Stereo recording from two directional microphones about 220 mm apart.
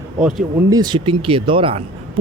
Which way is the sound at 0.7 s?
20° right (ahead or behind).